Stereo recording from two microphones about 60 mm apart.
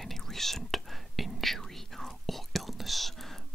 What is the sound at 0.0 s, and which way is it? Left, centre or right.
Whispering, centre.